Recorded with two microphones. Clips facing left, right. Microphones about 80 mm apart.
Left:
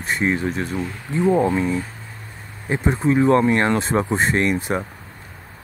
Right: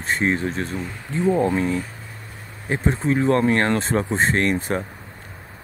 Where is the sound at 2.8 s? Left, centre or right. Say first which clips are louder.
Left 3 dB; centre.